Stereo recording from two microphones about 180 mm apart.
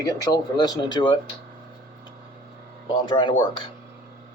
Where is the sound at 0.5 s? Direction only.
25° left (ahead or behind).